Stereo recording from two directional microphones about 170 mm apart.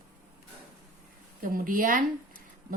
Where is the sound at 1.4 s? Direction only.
55° right (ahead or behind).